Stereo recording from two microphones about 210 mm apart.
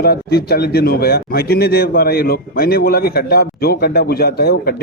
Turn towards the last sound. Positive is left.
turn(degrees=50)  # may be behind; listen again after turning